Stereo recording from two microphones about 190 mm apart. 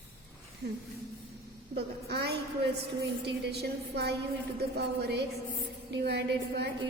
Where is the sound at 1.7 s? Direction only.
60° right (ahead or behind).